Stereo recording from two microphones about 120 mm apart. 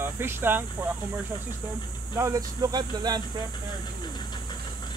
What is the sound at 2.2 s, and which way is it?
Speech, 25° right (ahead or behind).